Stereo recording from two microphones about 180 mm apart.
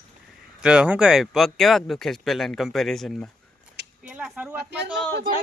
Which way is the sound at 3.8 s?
70° right (ahead or behind).